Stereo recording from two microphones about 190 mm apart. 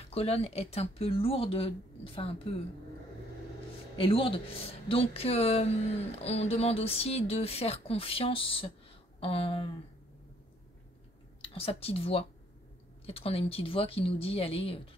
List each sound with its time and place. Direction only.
0.1 s speech: 30° left (ahead or behind)
4.0 s speech: 30° left (ahead or behind)
11.4 s speech: 30° left (ahead or behind)